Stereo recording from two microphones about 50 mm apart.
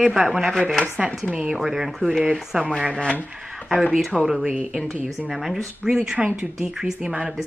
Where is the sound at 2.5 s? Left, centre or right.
Right.